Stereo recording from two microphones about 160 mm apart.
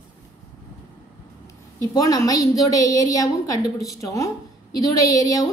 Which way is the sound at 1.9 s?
25° left (ahead or behind).